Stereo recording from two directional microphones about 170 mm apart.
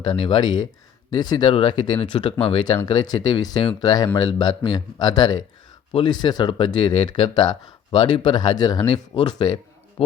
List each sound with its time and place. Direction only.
0.0 s speech: 30° left (ahead or behind)